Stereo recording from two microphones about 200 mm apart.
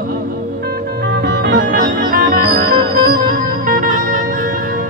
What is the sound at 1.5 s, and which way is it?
Music, 45° right (ahead or behind).